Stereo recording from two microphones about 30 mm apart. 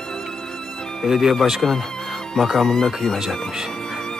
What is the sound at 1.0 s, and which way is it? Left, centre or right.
Speech, centre.